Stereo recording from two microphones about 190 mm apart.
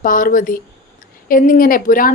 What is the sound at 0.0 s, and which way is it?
A woman's voice, 45° left (ahead or behind).